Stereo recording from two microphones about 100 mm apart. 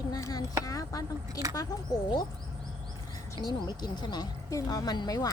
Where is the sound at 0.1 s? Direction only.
35° left (ahead or behind).